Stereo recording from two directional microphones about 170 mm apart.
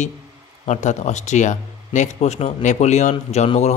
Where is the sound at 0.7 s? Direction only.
40° left (ahead or behind).